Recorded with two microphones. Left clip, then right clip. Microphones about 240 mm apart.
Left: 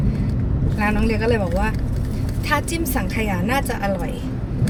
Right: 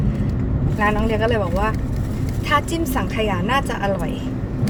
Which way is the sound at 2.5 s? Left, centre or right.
Centre.